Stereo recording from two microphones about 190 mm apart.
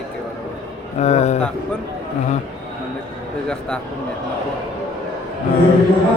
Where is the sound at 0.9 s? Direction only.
35° left (ahead or behind).